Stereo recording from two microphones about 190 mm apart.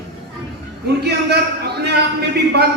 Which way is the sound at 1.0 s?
60° right (ahead or behind).